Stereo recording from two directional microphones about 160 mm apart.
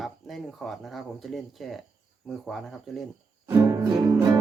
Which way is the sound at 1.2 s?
Centre (ahead or behind).